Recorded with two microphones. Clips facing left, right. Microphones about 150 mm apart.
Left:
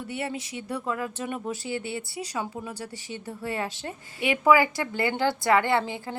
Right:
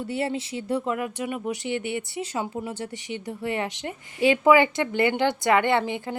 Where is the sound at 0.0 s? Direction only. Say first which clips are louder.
Right 5 dB; 30° right (ahead or behind).